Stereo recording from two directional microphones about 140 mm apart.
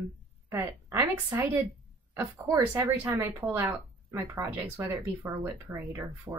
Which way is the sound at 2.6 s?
10° right (ahead or behind).